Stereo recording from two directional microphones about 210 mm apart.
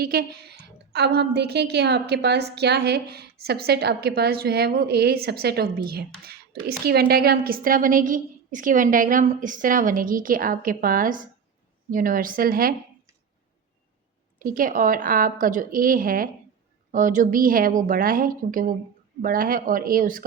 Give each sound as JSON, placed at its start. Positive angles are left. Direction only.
{"t": 0.0, "sound": "a woman's voice", "side_deg": -50}
{"t": 14.3, "sound": "a woman's voice", "side_deg": -40}